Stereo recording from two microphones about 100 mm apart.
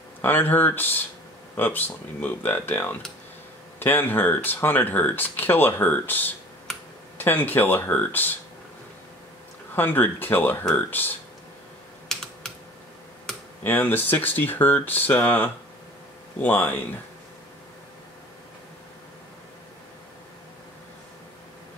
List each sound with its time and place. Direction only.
0.2 s speech: 20° left (ahead or behind)
9.8 s speech: 20° left (ahead or behind)
12.1 s computer keyboard: 5° left (ahead or behind)
13.7 s speech: 20° left (ahead or behind)